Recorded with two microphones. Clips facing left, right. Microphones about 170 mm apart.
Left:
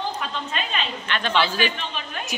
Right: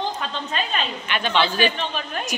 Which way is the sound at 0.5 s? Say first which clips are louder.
Right 4 dB; 35° right (ahead or behind).